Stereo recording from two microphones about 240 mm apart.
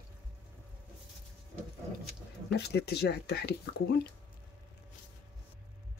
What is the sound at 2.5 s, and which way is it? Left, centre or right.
Speech, left.